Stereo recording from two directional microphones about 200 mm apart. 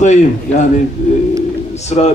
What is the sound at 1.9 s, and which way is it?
Speech, 35° left (ahead or behind).